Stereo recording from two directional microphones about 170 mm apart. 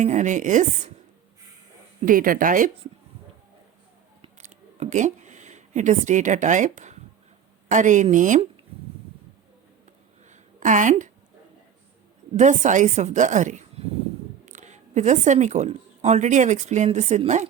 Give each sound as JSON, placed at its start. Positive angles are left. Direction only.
{"t": 0.0, "sound": "speech", "side_deg": -45}
{"t": 2.0, "sound": "speech", "side_deg": -55}
{"t": 4.2, "sound": "a sound", "side_deg": -40}
{"t": 7.7, "sound": "speech", "side_deg": -45}
{"t": 10.2, "sound": "a sound", "side_deg": -45}
{"t": 12.3, "sound": "speech", "side_deg": -45}